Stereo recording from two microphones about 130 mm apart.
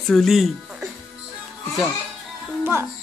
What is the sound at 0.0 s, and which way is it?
Speech, 5° left (ahead or behind).